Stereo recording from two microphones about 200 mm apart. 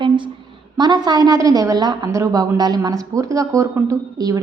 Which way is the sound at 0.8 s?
20° right (ahead or behind).